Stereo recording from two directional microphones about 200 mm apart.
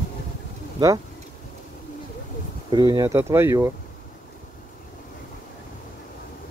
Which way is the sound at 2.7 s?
20° right (ahead or behind).